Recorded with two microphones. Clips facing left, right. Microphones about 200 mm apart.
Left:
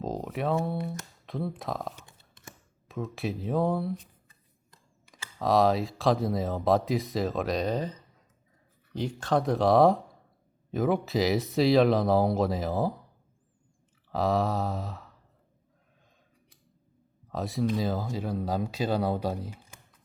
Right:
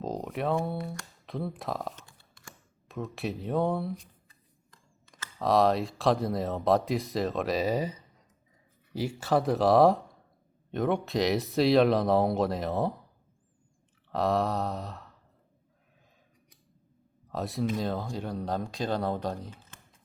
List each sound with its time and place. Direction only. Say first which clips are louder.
0.0 s a sound: left 1 dB; centre (ahead or behind)
1.3 s speech: left 1 dB; centre (ahead or behind)
2.0 s a sound: left 1 dB; 20° left (ahead or behind)
2.9 s speech: left 1 dB; centre (ahead or behind)
4.7 s camera: left 1 dB; 15° left (ahead or behind)
5.4 s speech: even; centre (ahead or behind)
14.1 s speech: left 1 dB; centre (ahead or behind)
17.2 s speech: left 2 dB; centre (ahead or behind)